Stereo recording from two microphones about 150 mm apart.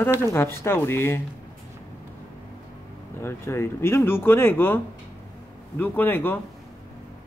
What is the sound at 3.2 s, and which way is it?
A man's voice, 15° left (ahead or behind).